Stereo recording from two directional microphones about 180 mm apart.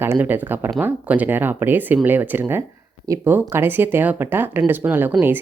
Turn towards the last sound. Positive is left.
turn(degrees=-10)  # may be behind; listen again after turning